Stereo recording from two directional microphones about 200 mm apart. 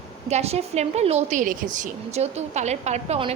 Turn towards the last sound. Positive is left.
turn(degrees=-30)  # may be behind; listen again after turning